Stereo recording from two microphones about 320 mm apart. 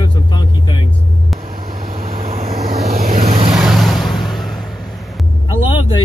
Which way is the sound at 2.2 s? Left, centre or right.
Right.